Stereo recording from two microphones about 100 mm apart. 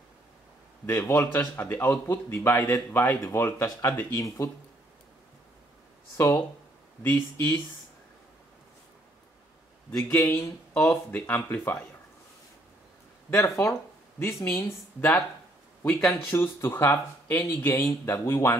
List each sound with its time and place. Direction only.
0.8 s speech: 30° left (ahead or behind)
1.3 s speech: 20° left (ahead or behind)
6.1 s speech: 25° left (ahead or behind)
9.9 s speech: 30° left (ahead or behind)
13.3 s speech: 30° left (ahead or behind)
16.3 s speech: 25° left (ahead or behind)